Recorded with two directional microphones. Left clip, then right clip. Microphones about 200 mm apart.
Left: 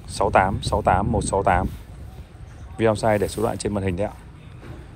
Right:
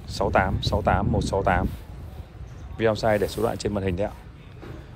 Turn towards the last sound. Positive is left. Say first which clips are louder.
# left 1 dB
turn(degrees=-5)  # may be behind; listen again after turning